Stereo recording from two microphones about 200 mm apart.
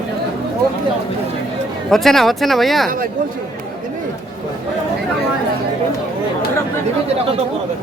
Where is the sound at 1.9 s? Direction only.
Centre (ahead or behind).